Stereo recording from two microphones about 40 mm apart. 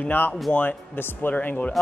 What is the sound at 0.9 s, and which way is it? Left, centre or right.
Speech, left.